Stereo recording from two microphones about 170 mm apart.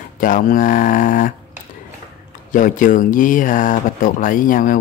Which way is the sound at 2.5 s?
50° left (ahead or behind).